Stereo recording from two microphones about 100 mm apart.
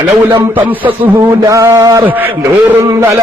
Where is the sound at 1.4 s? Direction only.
30° right (ahead or behind).